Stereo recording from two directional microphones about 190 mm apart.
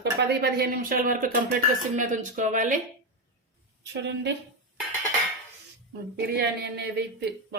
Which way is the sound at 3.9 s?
65° right (ahead or behind).